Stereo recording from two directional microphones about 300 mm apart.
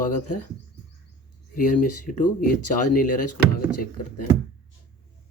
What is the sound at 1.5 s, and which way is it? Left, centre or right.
Speech, left.